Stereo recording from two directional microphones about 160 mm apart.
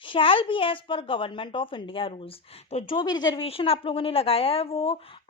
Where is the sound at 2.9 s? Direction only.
25° left (ahead or behind).